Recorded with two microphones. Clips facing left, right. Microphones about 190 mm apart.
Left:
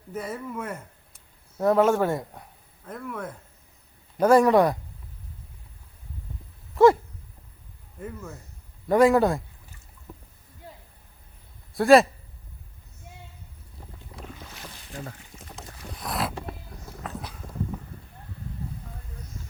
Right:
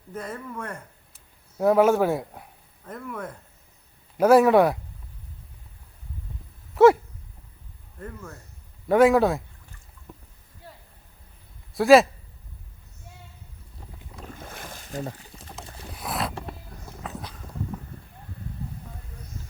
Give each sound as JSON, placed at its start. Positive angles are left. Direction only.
{"t": 0.1, "sound": "speech", "side_deg": 5}
{"t": 1.5, "sound": "speech", "side_deg": -10}
{"t": 7.9, "sound": "speech", "side_deg": 5}
{"t": 11.7, "sound": "a man's voice", "side_deg": 0}
{"t": 14.4, "sound": "boat", "side_deg": -50}
{"t": 16.0, "sound": "a sound", "side_deg": 0}